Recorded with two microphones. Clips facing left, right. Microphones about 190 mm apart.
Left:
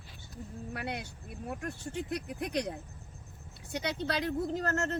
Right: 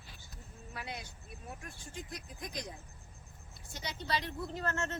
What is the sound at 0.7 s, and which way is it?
Speech, 65° left (ahead or behind).